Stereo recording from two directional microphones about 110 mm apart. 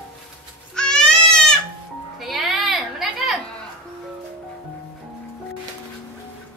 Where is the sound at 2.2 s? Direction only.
Centre (ahead or behind).